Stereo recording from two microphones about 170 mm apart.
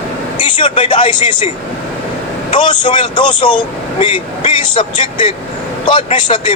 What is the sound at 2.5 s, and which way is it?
Speech, 25° left (ahead or behind).